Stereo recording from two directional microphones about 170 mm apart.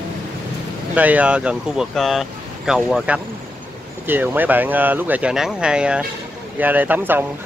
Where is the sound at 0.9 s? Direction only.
10° right (ahead or behind).